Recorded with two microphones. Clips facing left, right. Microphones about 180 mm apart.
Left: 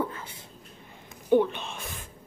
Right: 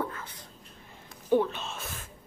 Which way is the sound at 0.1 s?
25° left (ahead or behind).